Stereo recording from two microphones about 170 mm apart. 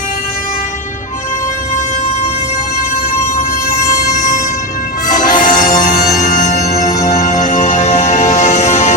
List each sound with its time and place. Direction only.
5.1 s bagpipes: 50° left (ahead or behind)
6.2 s music: 45° left (ahead or behind)